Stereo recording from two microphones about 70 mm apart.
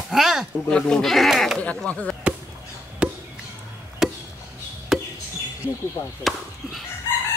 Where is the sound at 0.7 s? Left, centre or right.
Centre.